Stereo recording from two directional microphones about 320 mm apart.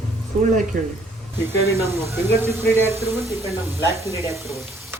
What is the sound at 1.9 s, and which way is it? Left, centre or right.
Speech, centre.